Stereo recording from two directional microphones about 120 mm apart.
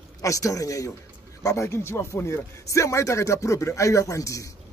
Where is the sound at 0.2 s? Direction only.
25° left (ahead or behind).